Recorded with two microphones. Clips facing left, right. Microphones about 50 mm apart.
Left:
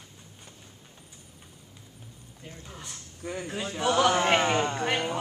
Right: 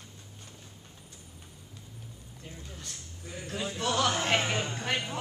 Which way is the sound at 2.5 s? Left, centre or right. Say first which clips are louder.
Left 1 dB; centre.